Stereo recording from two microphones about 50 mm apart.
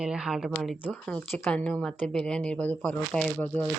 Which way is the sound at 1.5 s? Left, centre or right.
Left.